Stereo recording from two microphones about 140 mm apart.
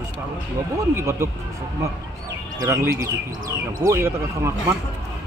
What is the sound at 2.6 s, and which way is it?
Speech, 20° right (ahead or behind).